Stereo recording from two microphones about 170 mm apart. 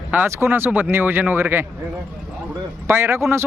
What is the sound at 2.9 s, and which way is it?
Speech, 15° right (ahead or behind).